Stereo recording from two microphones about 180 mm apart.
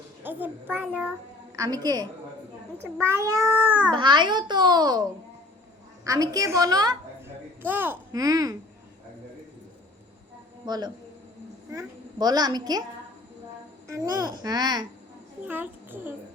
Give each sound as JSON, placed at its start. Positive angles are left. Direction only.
{"t": 0.2, "sound": "a child's voice", "side_deg": -10}
{"t": 1.5, "sound": "a child's voice", "side_deg": -20}
{"t": 3.9, "sound": "a child's voice", "side_deg": -25}
{"t": 6.1, "sound": "a child's voice", "side_deg": -20}
{"t": 7.6, "sound": "a child's voice", "side_deg": -10}
{"t": 10.7, "sound": "a child's voice", "side_deg": -25}
{"t": 13.9, "sound": "a child's voice", "side_deg": -20}
{"t": 15.4, "sound": "a woman's voice", "side_deg": -10}